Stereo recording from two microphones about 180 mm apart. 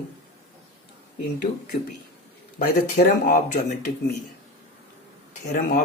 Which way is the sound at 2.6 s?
50° left (ahead or behind).